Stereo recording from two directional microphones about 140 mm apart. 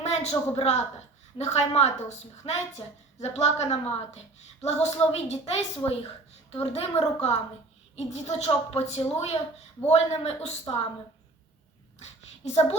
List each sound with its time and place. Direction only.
0.0 s a woman's voice: 50° left (ahead or behind)